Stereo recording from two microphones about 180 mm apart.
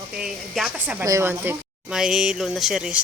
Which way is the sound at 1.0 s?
15° right (ahead or behind).